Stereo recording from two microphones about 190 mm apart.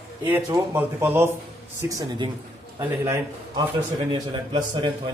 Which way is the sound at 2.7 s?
15° right (ahead or behind).